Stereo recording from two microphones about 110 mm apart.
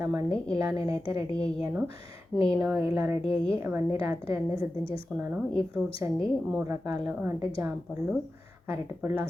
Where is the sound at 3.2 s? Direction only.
55° left (ahead or behind).